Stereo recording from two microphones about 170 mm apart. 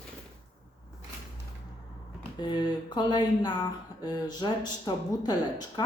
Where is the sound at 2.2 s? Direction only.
25° left (ahead or behind).